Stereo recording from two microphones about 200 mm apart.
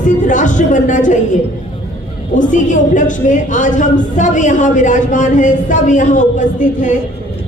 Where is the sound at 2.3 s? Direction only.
40° left (ahead or behind).